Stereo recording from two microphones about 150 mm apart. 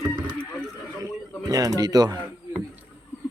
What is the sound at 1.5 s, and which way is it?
Speech, 25° right (ahead or behind).